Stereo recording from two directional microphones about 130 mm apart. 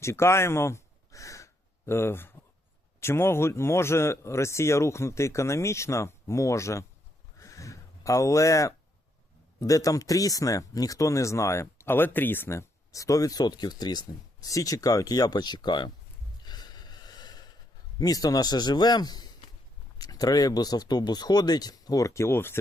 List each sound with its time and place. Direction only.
0.0 s a sound: 20° left (ahead or behind)
1.9 s speech: 20° left (ahead or behind)
7.3 s a sound: 25° left (ahead or behind)
9.6 s speech: 25° left (ahead or behind)
16.5 s snort: 30° left (ahead or behind)
18.0 s a man's voice: 30° left (ahead or behind)